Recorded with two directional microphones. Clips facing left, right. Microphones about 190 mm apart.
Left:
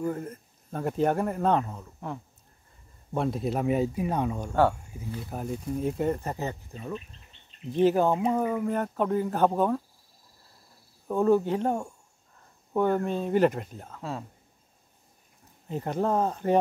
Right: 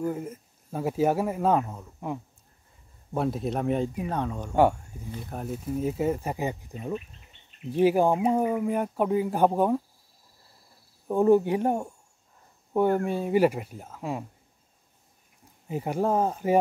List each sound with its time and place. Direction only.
0.0 s speech: 5° right (ahead or behind); by 4.5 s 10° left (ahead or behind)
5.3 s speech: centre (ahead or behind)
11.1 s speech: 15° right (ahead or behind)
15.7 s speech: 10° right (ahead or behind)